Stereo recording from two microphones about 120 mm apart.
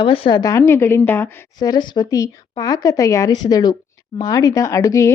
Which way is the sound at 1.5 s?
35° left (ahead or behind).